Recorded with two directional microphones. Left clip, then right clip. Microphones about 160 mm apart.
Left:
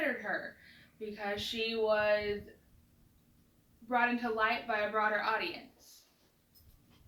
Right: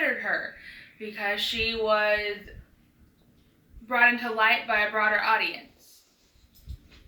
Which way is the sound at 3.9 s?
20° right (ahead or behind).